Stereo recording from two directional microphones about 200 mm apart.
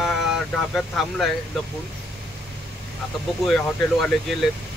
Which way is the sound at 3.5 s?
5° left (ahead or behind).